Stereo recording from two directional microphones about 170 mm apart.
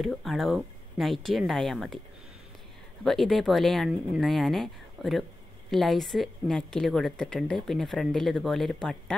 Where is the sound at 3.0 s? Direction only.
Centre (ahead or behind).